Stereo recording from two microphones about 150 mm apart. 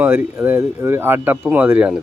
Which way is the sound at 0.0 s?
15° right (ahead or behind).